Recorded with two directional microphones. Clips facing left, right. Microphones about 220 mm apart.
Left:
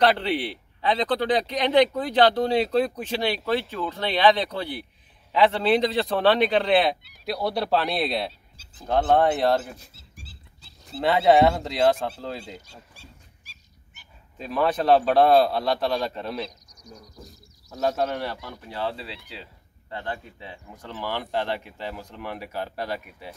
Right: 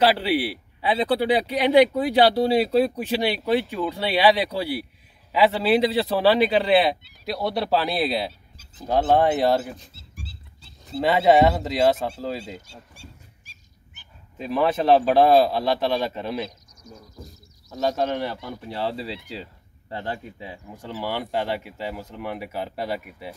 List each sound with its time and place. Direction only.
0.0 s a man's voice: 5° right (ahead or behind)
10.9 s a man's voice: centre (ahead or behind)
14.4 s a man's voice: 5° right (ahead or behind)
18.4 s speech: 30° right (ahead or behind)
20.8 s a man's voice: 10° right (ahead or behind)